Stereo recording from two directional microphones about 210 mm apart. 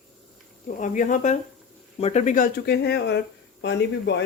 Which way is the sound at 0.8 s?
35° left (ahead or behind).